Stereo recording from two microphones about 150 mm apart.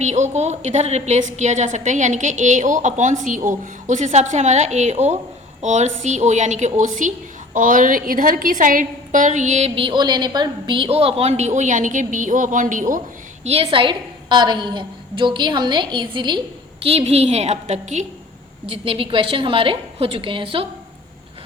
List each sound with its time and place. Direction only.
0.0 s a woman's voice: 50° right (ahead or behind)
13.4 s a woman's voice: 40° right (ahead or behind)
16.8 s a woman's voice: 40° right (ahead or behind)
18.7 s a woman's voice: 40° right (ahead or behind)